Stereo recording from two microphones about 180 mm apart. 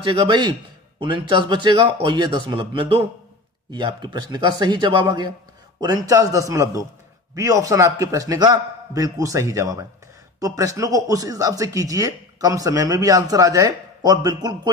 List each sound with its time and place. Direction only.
0.0 s speech: 25° right (ahead or behind)